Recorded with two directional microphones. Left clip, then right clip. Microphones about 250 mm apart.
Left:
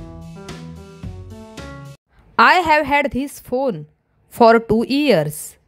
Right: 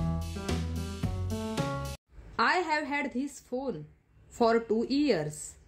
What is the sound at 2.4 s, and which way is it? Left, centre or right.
Speech, left.